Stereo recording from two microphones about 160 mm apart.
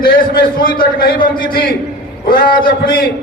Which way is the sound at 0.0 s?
65° left (ahead or behind).